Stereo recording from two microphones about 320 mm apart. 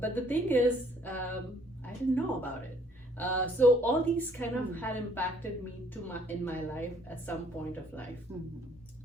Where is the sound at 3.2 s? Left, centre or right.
Centre.